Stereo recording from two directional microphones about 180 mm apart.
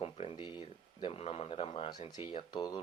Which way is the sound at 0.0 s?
30° left (ahead or behind).